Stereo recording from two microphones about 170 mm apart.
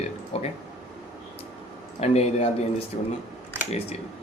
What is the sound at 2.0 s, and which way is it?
Speech, 40° left (ahead or behind).